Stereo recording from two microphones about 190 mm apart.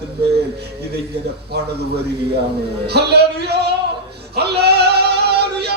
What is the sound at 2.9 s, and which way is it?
Speech, 60° right (ahead or behind).